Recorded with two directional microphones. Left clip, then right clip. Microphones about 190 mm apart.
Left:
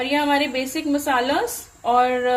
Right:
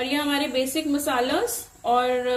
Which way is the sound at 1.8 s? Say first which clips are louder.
Left 4 dB; 45° left (ahead or behind).